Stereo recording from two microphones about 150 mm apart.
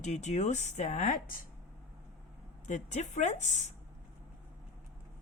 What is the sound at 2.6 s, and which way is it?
Speech, 50° left (ahead or behind).